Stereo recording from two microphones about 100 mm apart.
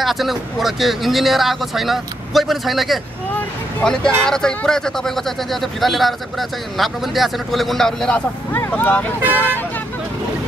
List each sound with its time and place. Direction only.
0.0 s speech: centre (ahead or behind)
8.5 s speech: 15° left (ahead or behind)
9.2 s speech: 20° right (ahead or behind)